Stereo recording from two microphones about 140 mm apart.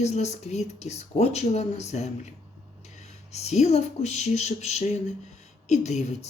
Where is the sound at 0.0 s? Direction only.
50° left (ahead or behind).